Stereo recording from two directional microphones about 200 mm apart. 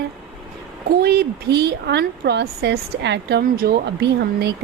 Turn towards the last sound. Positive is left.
turn(degrees=-55)  # may be behind; listen again after turning